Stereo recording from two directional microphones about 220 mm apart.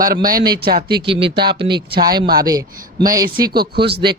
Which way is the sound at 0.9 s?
25° right (ahead or behind).